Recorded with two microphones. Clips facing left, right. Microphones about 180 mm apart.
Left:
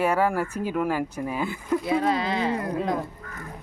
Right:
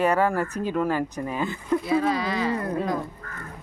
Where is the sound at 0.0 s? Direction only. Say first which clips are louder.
Right 1 dB; 10° left (ahead or behind).